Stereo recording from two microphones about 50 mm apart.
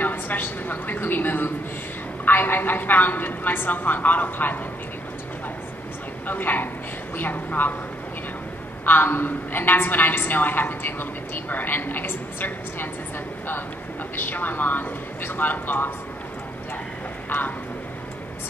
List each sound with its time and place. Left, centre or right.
0.0 s a woman's voice: left
6.2 s a woman's voice: left
8.8 s a woman's voice: left
14.1 s a woman's voice: left